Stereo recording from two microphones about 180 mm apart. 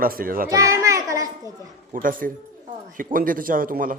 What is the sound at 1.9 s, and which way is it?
Speech, 50° right (ahead or behind).